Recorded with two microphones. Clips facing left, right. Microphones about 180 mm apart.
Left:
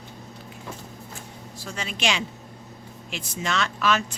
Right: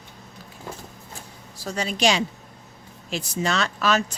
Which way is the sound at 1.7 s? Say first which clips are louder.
Right 6 dB; 40° right (ahead or behind).